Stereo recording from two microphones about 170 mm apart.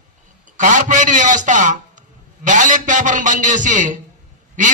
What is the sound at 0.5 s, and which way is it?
A man's voice, 50° right (ahead or behind).